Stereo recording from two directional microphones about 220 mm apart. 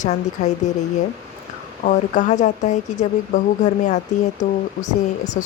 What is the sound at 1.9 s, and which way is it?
Speech, 35° left (ahead or behind).